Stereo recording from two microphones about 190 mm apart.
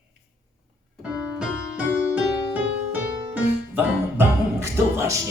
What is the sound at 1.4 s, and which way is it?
Music, 5° right (ahead or behind).